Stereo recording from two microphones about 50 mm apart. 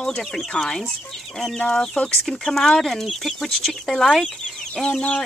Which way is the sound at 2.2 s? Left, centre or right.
Centre.